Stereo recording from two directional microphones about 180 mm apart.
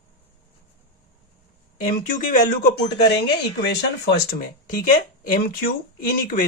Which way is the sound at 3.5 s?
65° left (ahead or behind).